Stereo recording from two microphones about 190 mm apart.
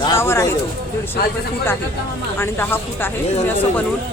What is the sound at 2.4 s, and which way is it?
Speech, 10° left (ahead or behind).